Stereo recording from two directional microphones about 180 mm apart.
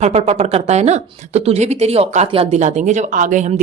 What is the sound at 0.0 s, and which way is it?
A woman's voice, 35° right (ahead or behind).